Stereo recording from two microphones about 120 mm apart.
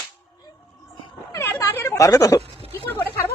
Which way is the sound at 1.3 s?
25° left (ahead or behind).